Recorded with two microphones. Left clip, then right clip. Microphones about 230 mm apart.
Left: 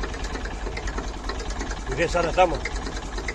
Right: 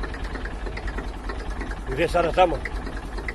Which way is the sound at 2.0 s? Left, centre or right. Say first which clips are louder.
Right 1 dB; centre.